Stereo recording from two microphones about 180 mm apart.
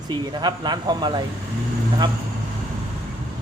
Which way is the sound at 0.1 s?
25° right (ahead or behind).